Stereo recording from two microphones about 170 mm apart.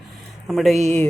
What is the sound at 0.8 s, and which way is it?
Music, 40° right (ahead or behind).